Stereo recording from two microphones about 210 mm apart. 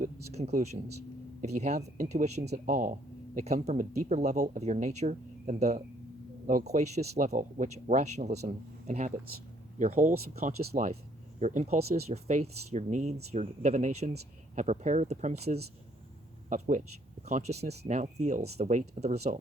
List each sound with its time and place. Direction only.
0.0 s speech: 35° right (ahead or behind)